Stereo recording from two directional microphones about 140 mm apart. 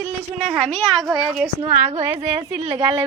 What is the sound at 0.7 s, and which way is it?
Speech, centre (ahead or behind).